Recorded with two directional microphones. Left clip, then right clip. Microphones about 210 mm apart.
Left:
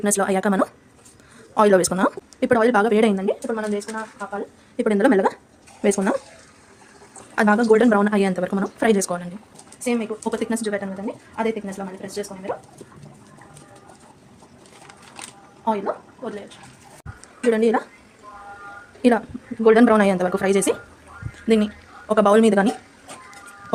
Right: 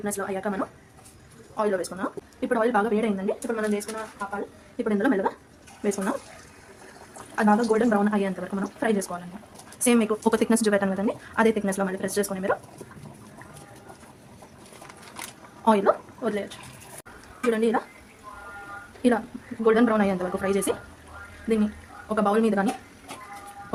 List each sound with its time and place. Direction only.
0.0 s a woman's voice: 50° left (ahead or behind)
2.4 s speech: 35° left (ahead or behind)
3.4 s a woman's voice: 20° left (ahead or behind)
4.8 s speech: 40° left (ahead or behind)
7.3 s speech: 40° left (ahead or behind)
9.8 s a woman's voice: 25° right (ahead or behind)
15.6 s a woman's voice: 25° right (ahead or behind)
17.4 s a woman's voice: 20° left (ahead or behind)
19.0 s a woman's voice: 25° left (ahead or behind)